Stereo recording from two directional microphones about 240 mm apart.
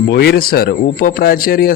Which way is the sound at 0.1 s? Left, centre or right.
Left.